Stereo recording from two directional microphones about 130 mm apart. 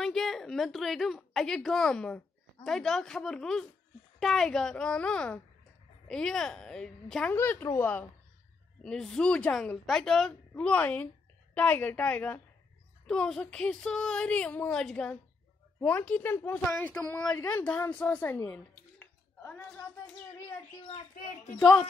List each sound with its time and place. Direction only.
0.0 s a woman's voice: 5° left (ahead or behind)
7.3 s speech: 20° left (ahead or behind)
8.8 s a woman's voice: 5° left (ahead or behind)
17.9 s a sound: 10° left (ahead or behind)
21.1 s speech: 75° left (ahead or behind)
21.5 s a woman's voice: 10° left (ahead or behind)